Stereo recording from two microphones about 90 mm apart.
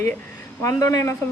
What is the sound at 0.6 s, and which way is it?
Speech, 40° left (ahead or behind).